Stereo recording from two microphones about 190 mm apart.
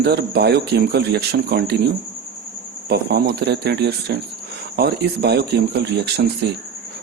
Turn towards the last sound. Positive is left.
turn(degrees=-60)  # may be behind; listen again after turning